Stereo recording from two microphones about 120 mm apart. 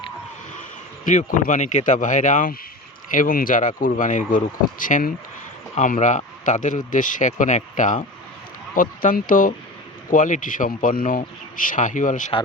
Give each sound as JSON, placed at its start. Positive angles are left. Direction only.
{"t": 1.0, "sound": "speech", "side_deg": 90}
{"t": 9.0, "sound": "speech", "side_deg": 90}